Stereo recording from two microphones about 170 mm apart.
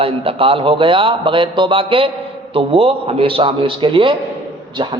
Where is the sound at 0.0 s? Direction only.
35° right (ahead or behind).